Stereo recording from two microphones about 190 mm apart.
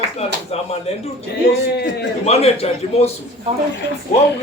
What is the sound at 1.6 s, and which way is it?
Speech, 60° left (ahead or behind).